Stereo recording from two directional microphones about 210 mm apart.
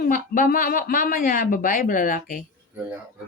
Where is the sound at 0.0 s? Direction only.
40° left (ahead or behind).